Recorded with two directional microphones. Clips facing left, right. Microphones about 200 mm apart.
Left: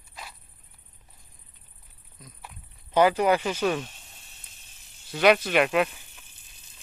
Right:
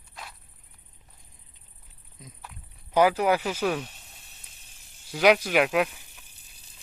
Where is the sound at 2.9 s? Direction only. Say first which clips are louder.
Left 1 dB; 10° right (ahead or behind).